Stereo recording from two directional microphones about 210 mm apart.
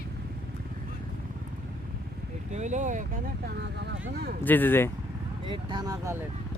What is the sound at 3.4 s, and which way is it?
Speech, 55° right (ahead or behind).